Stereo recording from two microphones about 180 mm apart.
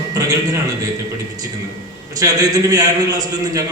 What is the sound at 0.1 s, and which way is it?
Speech, 20° right (ahead or behind).